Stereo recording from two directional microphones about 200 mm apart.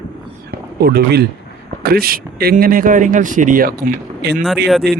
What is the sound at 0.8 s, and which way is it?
Speech, 50° right (ahead or behind).